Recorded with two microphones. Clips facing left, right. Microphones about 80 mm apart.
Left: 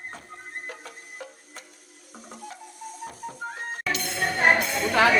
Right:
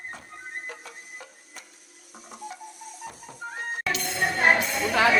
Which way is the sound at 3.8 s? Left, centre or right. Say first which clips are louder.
Right 1 dB; centre.